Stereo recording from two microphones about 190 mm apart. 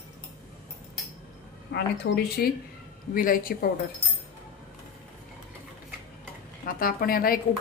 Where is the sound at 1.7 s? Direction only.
60° left (ahead or behind).